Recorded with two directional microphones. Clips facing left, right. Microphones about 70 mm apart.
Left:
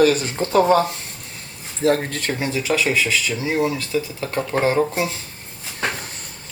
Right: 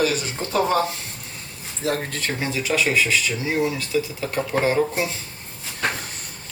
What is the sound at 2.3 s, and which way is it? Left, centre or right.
Speech, centre.